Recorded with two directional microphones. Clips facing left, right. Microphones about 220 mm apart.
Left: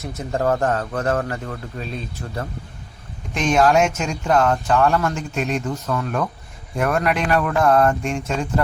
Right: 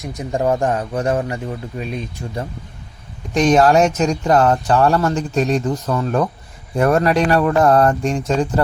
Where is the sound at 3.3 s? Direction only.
35° right (ahead or behind).